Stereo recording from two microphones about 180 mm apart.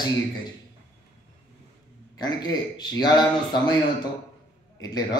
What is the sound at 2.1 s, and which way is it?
Speech, 20° left (ahead or behind).